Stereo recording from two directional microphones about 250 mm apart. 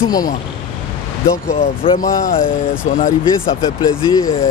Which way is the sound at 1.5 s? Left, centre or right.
Left.